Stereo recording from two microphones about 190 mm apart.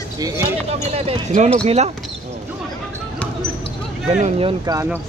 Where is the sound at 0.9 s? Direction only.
35° right (ahead or behind).